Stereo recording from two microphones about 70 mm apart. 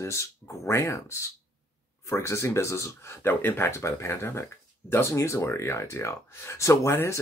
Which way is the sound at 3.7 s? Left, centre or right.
Left.